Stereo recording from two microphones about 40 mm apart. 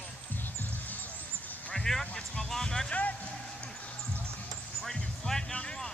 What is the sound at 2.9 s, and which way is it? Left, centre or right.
Speech, left.